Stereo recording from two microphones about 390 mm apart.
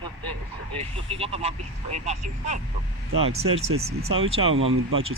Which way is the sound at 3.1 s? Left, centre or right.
Centre.